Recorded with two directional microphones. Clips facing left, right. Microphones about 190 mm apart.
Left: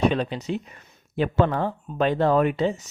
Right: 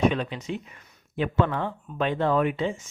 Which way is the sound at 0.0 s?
35° left (ahead or behind).